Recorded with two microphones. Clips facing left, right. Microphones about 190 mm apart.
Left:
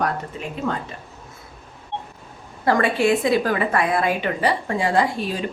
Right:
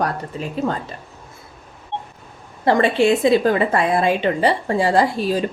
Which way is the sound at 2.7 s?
25° right (ahead or behind).